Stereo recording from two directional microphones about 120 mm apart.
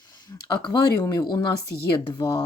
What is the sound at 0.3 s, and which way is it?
A woman's voice, 35° left (ahead or behind).